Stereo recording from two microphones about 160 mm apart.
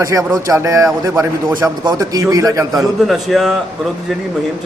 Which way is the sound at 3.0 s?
Centre (ahead or behind).